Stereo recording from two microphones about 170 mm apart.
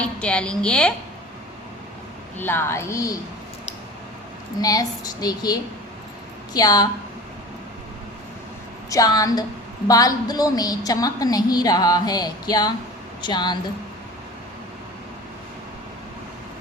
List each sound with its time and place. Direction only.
0.0 s a woman's voice: 5° left (ahead or behind)
2.4 s a woman's voice: 15° left (ahead or behind)
4.6 s a woman's voice: 20° left (ahead or behind)
8.9 s a woman's voice: 20° left (ahead or behind)